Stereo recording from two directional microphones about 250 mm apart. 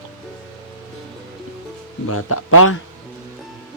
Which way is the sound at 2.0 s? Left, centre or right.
Left.